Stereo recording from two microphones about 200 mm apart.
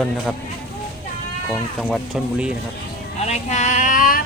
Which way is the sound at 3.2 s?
35° left (ahead or behind).